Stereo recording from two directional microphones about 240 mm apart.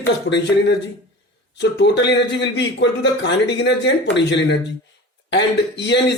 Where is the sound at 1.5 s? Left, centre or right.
Left.